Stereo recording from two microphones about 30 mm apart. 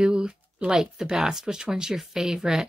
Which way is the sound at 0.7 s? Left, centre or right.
Right.